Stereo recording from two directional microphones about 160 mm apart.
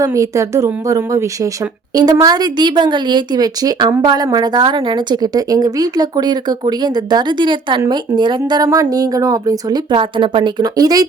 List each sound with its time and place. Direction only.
0.0 s a woman's voice: 20° right (ahead or behind)